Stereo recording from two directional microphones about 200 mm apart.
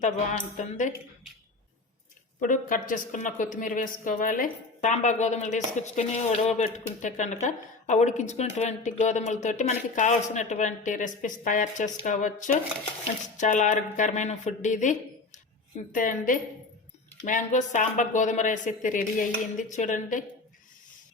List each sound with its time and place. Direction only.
0.5 s a woman's voice: 40° left (ahead or behind)
2.4 s a woman's voice: 40° left (ahead or behind)